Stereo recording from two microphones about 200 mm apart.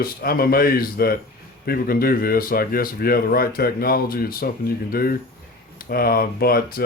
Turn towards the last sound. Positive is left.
turn(degrees=50)  # may be behind; listen again after turning